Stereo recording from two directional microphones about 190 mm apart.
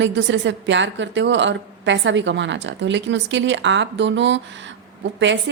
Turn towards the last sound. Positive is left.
turn(degrees=-70)  # may be behind; listen again after turning